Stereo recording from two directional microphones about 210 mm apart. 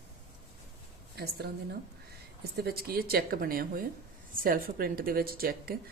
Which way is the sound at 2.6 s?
45° right (ahead or behind).